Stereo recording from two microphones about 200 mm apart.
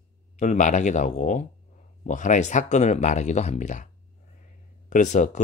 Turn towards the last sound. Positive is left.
turn(degrees=40)  # may be behind; listen again after turning